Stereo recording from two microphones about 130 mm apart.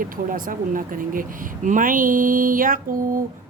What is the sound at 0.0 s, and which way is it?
Speech, 90° right.